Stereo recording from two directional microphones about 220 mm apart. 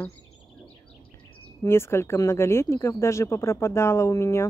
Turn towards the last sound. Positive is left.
turn(degrees=15)  # may be behind; listen again after turning